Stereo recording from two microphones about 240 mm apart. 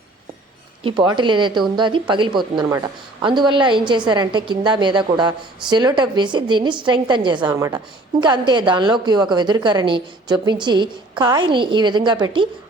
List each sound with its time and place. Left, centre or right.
0.8 s a woman's voice: right